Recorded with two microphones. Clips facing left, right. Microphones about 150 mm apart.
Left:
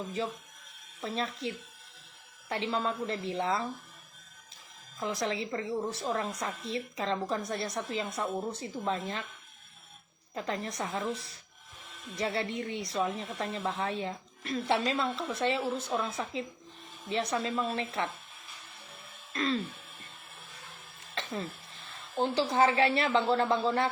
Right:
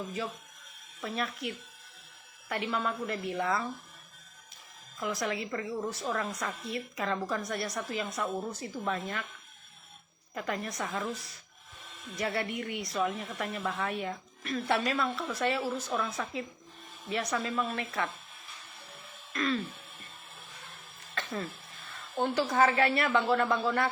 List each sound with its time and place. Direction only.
1.0 s speech: 25° left (ahead or behind)
4.9 s speech: 25° left (ahead or behind)
10.3 s speech: 25° left (ahead or behind)
19.3 s throat clearing: 30° left (ahead or behind)
22.2 s speech: 25° left (ahead or behind)